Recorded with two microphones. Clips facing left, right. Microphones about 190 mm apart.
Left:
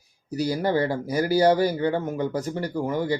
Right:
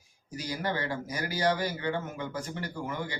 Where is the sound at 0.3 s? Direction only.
40° left (ahead or behind).